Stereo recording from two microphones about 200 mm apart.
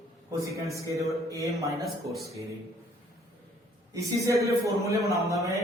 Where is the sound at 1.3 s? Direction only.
15° right (ahead or behind).